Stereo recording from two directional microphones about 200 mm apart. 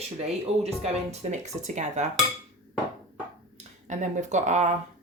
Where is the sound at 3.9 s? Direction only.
35° right (ahead or behind).